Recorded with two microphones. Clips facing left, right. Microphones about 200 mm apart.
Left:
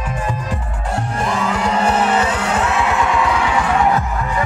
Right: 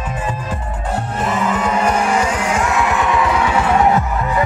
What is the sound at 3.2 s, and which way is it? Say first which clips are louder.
Music: right 1 dB; 25° right (ahead or behind).